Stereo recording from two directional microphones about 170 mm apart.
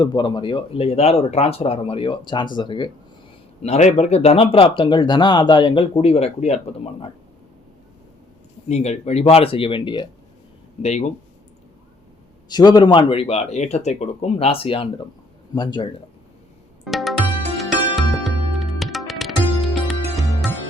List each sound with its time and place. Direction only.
0.0 s speech: 25° left (ahead or behind)
3.6 s speech: 40° left (ahead or behind)
8.7 s speech: 40° left (ahead or behind)
10.8 s speech: 40° left (ahead or behind)
12.5 s speech: 25° left (ahead or behind)
16.8 s music: centre (ahead or behind)